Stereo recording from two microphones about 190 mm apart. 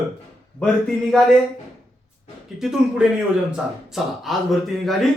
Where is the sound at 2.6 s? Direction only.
5° right (ahead or behind).